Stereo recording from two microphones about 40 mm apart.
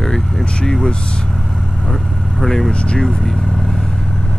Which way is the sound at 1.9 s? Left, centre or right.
Centre.